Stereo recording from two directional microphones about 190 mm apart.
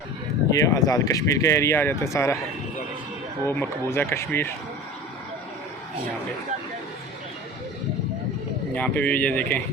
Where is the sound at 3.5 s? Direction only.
10° left (ahead or behind).